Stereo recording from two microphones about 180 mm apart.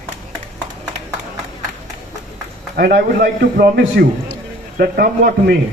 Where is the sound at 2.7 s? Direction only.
55° right (ahead or behind).